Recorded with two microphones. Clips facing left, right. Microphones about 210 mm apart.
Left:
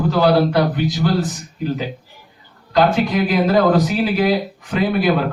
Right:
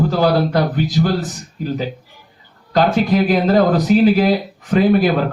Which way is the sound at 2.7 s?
45° right (ahead or behind).